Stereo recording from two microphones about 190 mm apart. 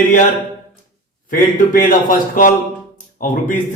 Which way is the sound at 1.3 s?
45° left (ahead or behind).